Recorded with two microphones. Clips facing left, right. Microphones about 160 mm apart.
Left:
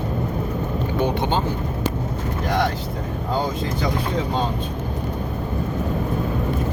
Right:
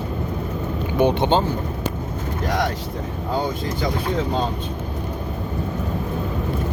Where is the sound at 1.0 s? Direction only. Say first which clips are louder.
Right 5 dB; 25° right (ahead or behind).